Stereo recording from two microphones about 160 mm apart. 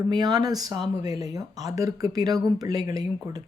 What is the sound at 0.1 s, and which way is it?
Speech, 25° right (ahead or behind).